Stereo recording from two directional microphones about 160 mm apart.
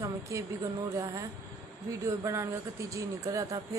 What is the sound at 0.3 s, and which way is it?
Speech, 20° right (ahead or behind).